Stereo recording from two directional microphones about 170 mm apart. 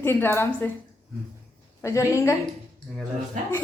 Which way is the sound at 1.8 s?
15° left (ahead or behind).